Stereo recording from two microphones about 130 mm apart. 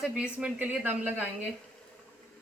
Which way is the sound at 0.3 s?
10° right (ahead or behind).